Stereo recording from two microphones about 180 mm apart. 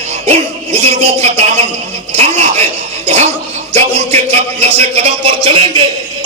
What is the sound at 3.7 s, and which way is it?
Speech, 35° right (ahead or behind).